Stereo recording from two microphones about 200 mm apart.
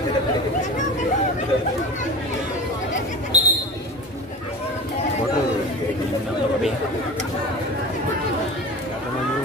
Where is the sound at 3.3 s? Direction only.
35° right (ahead or behind).